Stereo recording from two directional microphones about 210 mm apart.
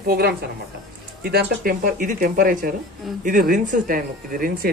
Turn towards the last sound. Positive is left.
turn(degrees=-40)  # may be behind; listen again after turning